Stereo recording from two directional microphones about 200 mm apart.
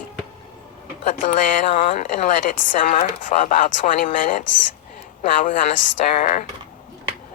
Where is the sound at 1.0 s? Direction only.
40° left (ahead or behind).